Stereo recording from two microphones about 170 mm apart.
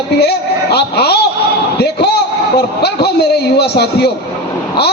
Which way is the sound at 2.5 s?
75° left (ahead or behind).